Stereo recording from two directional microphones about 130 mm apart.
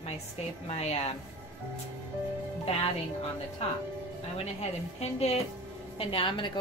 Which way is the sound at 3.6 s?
50° left (ahead or behind).